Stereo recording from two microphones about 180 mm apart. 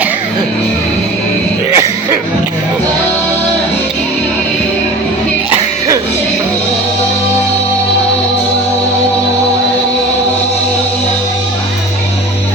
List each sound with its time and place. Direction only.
1.7 s cough: 15° right (ahead or behind)